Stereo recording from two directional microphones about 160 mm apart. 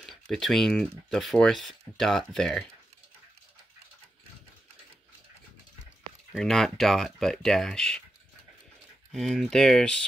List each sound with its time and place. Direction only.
0.0 s speech: centre (ahead or behind)
6.3 s speech: centre (ahead or behind)
9.1 s speech: centre (ahead or behind)